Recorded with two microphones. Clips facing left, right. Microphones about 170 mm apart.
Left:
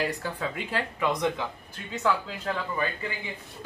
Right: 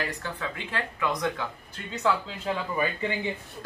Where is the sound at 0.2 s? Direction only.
30° left (ahead or behind).